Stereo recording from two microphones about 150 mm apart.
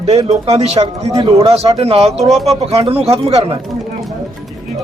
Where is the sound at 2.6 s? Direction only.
45° right (ahead or behind).